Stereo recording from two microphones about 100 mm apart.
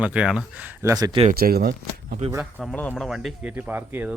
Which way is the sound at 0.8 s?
35° right (ahead or behind).